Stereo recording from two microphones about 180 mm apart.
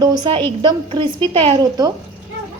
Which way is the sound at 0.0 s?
20° right (ahead or behind).